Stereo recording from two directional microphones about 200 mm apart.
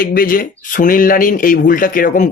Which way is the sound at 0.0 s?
45° left (ahead or behind).